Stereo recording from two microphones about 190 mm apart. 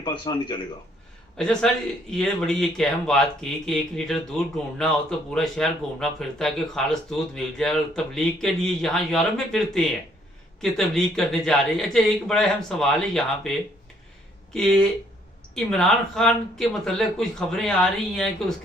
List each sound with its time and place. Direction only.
0.0 s speech: 25° left (ahead or behind)
1.4 s speech: 5° left (ahead or behind)
14.5 s speech: 5° left (ahead or behind)